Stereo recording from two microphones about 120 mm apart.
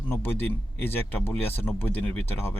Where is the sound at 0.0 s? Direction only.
15° left (ahead or behind).